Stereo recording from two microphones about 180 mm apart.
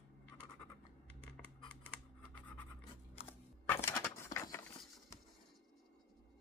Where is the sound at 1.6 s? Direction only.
5° left (ahead or behind).